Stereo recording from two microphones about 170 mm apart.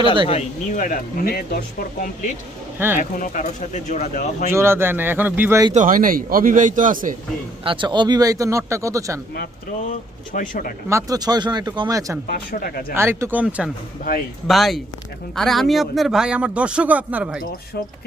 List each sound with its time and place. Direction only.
0.3 s speech: 45° left (ahead or behind); by 1.5 s 60° left (ahead or behind)
2.7 s speech: 10° right (ahead or behind)
3.0 s speech: 50° left (ahead or behind)
4.5 s speech: 15° right (ahead or behind)
5.7 s speech: 50° right (ahead or behind)
7.6 s speech: 30° right (ahead or behind)
9.8 s speech: 50° left (ahead or behind)
10.8 s speech: 20° right (ahead or behind)
12.3 s speech: 60° left (ahead or behind)
12.9 s a man's voice: 15° right (ahead or behind)